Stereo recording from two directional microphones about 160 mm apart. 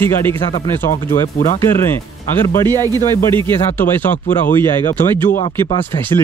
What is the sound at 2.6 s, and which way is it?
Speech, 25° right (ahead or behind).